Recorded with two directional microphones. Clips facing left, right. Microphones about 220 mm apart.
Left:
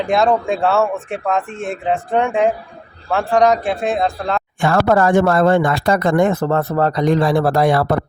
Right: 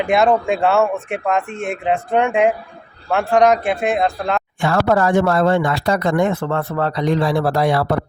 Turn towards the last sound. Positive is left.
turn(degrees=50)  # may be behind; listen again after turning